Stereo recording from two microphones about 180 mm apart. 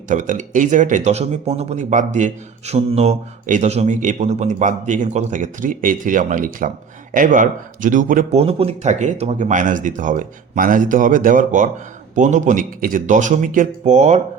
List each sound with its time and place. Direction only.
0.1 s speech: 45° right (ahead or behind)
8.4 s speech: 35° right (ahead or behind)